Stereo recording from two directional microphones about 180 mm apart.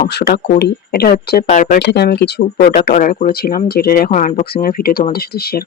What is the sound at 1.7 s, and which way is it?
Speech, 70° left (ahead or behind).